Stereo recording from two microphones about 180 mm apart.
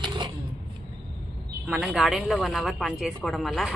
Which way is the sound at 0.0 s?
25° right (ahead or behind).